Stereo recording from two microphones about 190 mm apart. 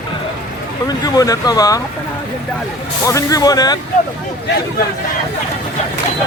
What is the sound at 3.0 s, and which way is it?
Speech, 15° left (ahead or behind).